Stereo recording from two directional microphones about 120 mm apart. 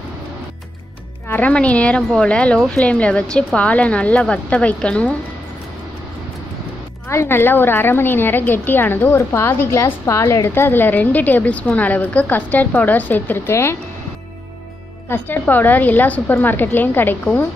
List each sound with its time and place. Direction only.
1.3 s a woman's voice: 10° left (ahead or behind)
7.1 s a woman's voice: 20° left (ahead or behind)
15.0 s a woman's voice: 15° left (ahead or behind)